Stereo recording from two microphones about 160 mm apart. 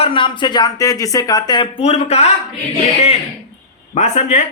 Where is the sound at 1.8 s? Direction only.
40° left (ahead or behind).